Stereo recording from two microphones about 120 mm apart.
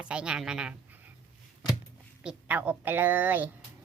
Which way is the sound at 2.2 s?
10° right (ahead or behind).